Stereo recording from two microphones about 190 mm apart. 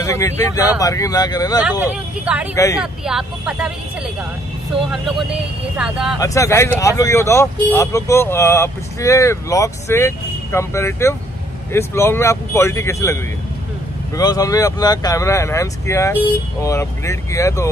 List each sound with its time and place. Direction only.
0.0 s speech: 15° left (ahead or behind)
1.6 s speech: 10° right (ahead or behind)
2.5 s speech: 15° left (ahead or behind)
2.8 s speech: 5° right (ahead or behind)
4.9 s speech: centre (ahead or behind)
6.1 s speech: 15° left (ahead or behind)